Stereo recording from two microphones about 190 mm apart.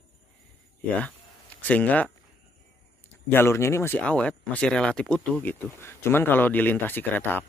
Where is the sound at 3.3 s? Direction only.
15° left (ahead or behind).